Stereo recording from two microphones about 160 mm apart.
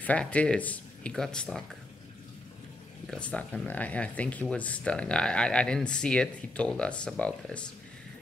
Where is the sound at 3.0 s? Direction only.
5° left (ahead or behind).